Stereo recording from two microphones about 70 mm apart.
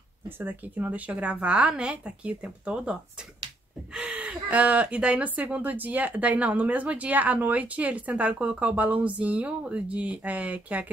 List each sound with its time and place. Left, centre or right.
0.4 s speech: right